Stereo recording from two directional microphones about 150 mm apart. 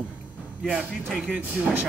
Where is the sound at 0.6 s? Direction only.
10° right (ahead or behind).